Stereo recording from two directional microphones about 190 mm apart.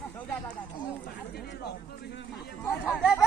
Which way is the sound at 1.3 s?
55° left (ahead or behind).